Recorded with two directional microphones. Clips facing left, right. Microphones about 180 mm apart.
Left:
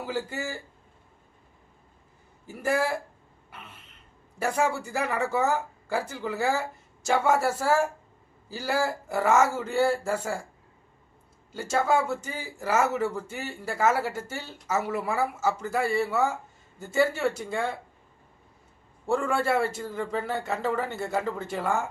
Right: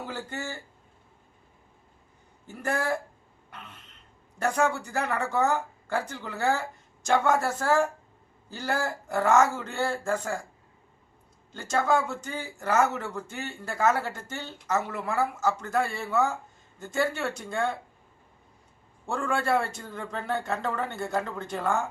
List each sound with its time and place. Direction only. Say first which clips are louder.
0.0 s speech: left 4 dB; 5° left (ahead or behind)
2.5 s speech: left 2 dB; 5° left (ahead or behind)
3.5 s throat clearing: right 1 dB; 5° left (ahead or behind)
4.4 s speech: even; 5° left (ahead or behind)
11.5 s speech: left 1 dB; 5° left (ahead or behind)
19.0 s a man's voice: left 3 dB; 5° left (ahead or behind)